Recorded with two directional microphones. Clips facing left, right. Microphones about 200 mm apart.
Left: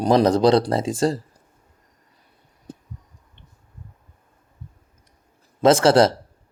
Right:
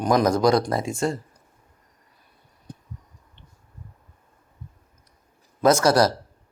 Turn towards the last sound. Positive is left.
turn(degrees=25)  # may be behind; listen again after turning